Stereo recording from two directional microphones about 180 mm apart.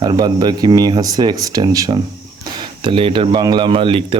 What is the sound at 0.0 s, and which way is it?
Speech, 25° right (ahead or behind).